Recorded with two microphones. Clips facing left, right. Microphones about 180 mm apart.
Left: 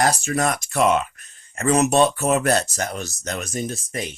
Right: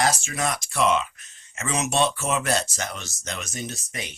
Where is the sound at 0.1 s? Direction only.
40° left (ahead or behind).